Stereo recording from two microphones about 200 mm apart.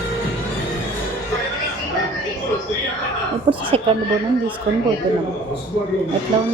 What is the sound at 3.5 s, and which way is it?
Speech, 25° right (ahead or behind).